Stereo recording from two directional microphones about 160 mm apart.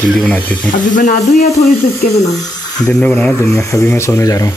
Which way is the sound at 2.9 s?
10° left (ahead or behind).